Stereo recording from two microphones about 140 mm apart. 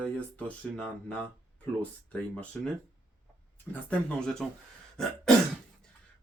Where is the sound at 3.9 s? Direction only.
5° left (ahead or behind).